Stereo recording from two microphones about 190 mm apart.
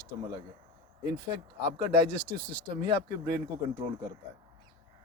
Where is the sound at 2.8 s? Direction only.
25° right (ahead or behind).